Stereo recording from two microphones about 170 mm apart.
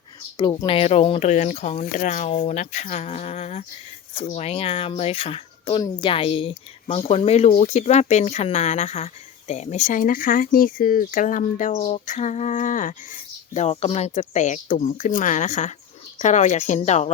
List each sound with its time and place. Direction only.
0.3 s speech: 25° left (ahead or behind); by 17.1 s 45° left (ahead or behind)